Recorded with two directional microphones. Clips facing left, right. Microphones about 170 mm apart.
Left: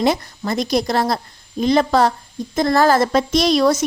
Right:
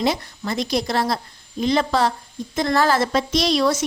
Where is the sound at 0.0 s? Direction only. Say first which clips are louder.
Left 4 dB; 45° left (ahead or behind).